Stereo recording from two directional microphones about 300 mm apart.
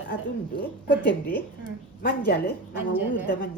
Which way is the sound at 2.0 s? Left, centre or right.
Left.